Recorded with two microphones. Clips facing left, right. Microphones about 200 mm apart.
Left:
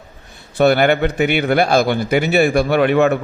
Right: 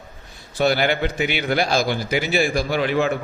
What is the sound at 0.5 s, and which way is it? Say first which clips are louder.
A man's voice: left 6 dB; 60° left (ahead or behind).